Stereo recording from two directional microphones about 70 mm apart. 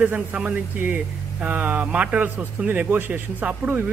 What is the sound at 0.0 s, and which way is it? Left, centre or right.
Speech, right.